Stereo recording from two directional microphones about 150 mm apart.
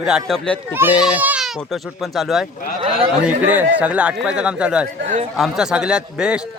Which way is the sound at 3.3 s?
10° right (ahead or behind).